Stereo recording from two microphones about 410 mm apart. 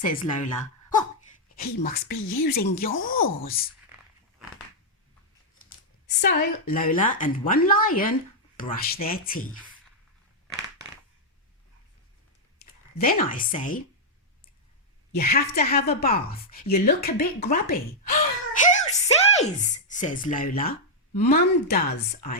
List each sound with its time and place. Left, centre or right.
0.1 s a woman's voice: centre
6.1 s a woman's voice: left
12.5 s a sound: left
13.2 s a woman's voice: centre
15.1 s a woman's voice: left